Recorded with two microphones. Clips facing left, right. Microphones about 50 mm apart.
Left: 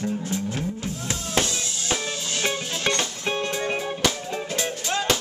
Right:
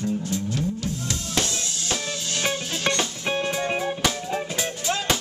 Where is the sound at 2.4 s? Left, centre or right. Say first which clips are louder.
Even; centre.